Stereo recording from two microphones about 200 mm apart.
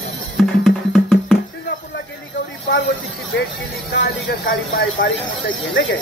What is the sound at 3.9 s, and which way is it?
Speech, 55° left (ahead or behind).